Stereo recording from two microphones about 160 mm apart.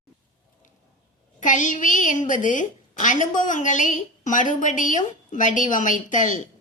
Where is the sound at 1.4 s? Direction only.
50° left (ahead or behind).